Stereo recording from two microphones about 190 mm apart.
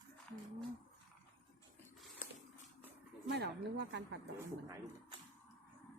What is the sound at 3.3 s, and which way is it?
Speech, 60° right (ahead or behind).